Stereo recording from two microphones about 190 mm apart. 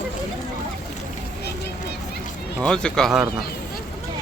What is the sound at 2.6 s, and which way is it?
Speech, 5° left (ahead or behind).